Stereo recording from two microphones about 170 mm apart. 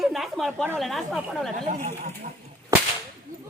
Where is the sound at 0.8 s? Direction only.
Centre (ahead or behind).